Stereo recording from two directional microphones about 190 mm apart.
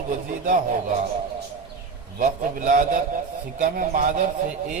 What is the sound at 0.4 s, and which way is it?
Speech, 45° right (ahead or behind).